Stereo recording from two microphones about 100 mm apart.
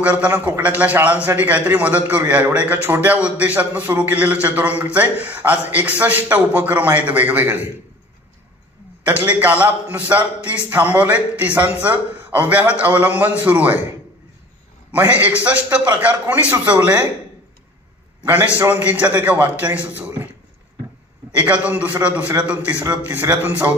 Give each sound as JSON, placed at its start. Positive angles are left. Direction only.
{"t": 0.0, "sound": "a man's voice", "side_deg": -15}
{"t": 9.0, "sound": "a man's voice", "side_deg": -15}
{"t": 14.9, "sound": "a man's voice", "side_deg": -15}
{"t": 18.2, "sound": "a man's voice", "side_deg": -15}
{"t": 20.0, "sound": "a sound", "side_deg": -20}
{"t": 21.4, "sound": "a man's voice", "side_deg": -15}